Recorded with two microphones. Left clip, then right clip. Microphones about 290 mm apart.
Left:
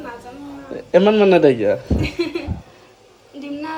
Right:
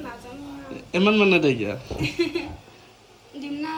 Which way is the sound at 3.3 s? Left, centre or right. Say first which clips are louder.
Left 3 dB; centre.